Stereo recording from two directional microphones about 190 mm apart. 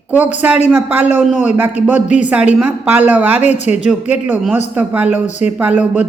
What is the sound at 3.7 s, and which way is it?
Speech, 35° left (ahead or behind).